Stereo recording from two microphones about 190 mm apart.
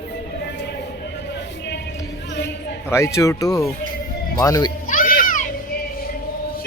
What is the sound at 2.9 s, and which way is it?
Speech, 15° left (ahead or behind).